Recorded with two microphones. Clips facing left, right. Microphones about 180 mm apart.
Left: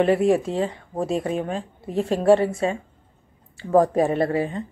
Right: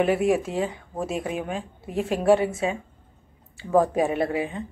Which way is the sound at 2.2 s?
Centre (ahead or behind).